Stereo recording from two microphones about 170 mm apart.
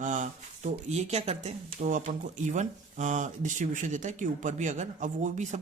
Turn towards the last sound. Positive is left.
turn(degrees=-45)  # may be behind; listen again after turning